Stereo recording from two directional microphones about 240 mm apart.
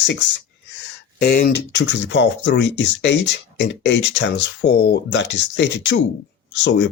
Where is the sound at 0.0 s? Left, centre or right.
Left.